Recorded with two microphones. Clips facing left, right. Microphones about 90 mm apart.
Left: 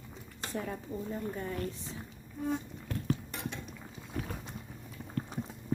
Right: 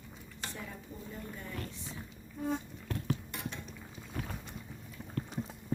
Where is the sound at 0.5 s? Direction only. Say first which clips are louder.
Left 11 dB; 45° left (ahead or behind).